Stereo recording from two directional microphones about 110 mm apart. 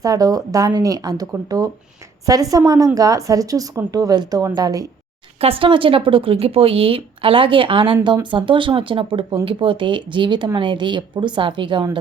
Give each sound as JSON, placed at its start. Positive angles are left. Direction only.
{"t": 0.0, "sound": "a woman's voice", "side_deg": -35}
{"t": 5.4, "sound": "speech", "side_deg": -55}